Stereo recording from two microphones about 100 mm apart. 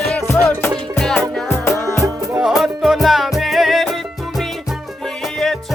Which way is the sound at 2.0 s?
35° right (ahead or behind).